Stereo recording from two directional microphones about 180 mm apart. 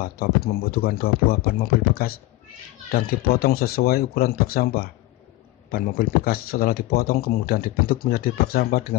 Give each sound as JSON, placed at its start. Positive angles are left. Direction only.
{"t": 0.0, "sound": "speech", "side_deg": 55}